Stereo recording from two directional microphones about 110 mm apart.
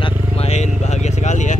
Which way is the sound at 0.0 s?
75° left (ahead or behind).